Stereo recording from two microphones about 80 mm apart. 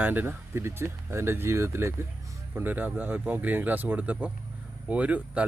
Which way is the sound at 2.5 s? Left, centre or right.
Right.